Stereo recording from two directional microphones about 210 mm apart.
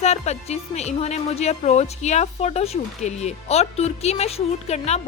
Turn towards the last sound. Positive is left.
turn(degrees=30)  # may be behind; listen again after turning